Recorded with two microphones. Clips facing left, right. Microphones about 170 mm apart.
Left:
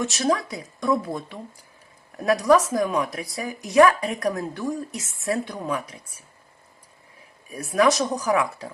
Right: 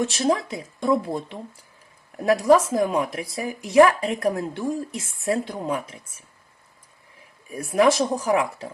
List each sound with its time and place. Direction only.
0.0 s speech: 25° right (ahead or behind)
7.5 s speech: 25° right (ahead or behind)